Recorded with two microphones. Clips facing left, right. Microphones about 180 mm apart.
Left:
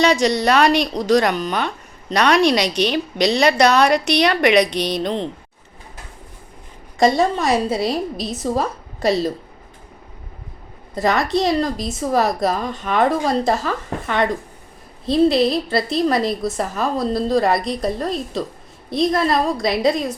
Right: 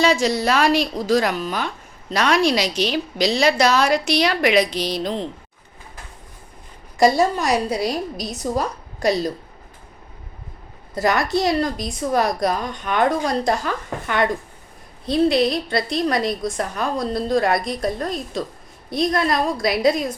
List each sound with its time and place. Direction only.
0.0 s a woman's voice: 70° left (ahead or behind)
7.0 s speech: centre (ahead or behind)
10.9 s speech: centre (ahead or behind)